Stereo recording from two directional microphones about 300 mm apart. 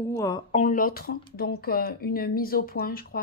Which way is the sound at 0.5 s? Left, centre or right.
Left.